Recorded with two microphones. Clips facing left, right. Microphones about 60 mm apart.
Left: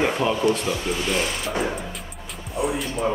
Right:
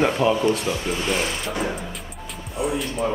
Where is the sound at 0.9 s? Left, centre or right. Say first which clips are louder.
Even; centre.